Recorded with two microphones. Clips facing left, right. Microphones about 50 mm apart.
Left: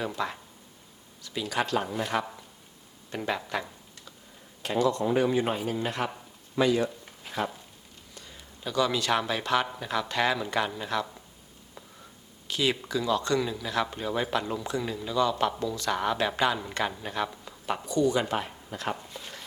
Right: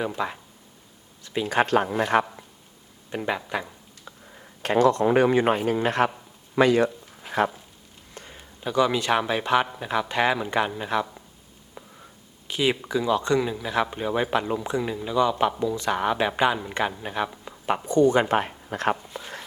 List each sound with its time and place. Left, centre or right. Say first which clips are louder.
0.2 s speech: right 1 dB; right
1.2 s speech: right 7 dB; right
3.1 s speech: right 3 dB; centre
4.6 s speech: right 6 dB; right
7.3 s a sound: right 8 dB; right
8.1 s speech: right 5 dB; right
12.5 s speech: right 4 dB; right
17.2 s a sound: right 3 dB; centre
17.8 s speech: right 6 dB; right